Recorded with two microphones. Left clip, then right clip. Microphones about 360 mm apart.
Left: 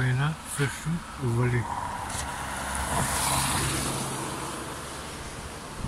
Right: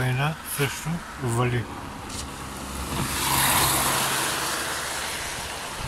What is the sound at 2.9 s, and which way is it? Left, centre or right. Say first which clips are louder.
Vehicle: right 1 dB; centre.